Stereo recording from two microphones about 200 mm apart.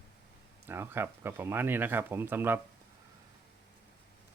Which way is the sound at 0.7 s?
10° right (ahead or behind).